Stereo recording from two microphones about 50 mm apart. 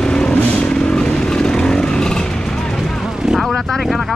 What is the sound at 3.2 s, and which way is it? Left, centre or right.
Vehicle, centre.